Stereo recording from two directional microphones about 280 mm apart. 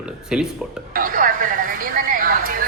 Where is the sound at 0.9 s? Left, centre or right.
Right.